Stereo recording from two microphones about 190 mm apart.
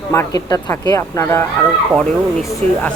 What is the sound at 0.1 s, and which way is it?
Speech, 15° left (ahead or behind).